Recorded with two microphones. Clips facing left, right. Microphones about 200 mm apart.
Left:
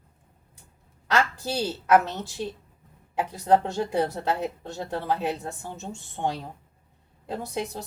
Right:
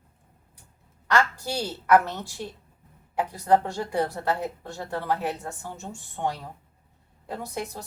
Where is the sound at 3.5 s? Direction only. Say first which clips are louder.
Left 1 dB; 20° left (ahead or behind).